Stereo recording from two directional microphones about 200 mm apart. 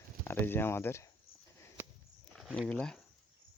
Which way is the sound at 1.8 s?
10° right (ahead or behind).